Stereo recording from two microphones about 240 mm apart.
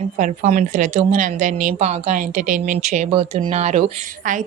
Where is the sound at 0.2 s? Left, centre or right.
Right.